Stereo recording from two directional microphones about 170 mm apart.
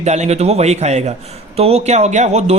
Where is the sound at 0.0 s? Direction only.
40° right (ahead or behind).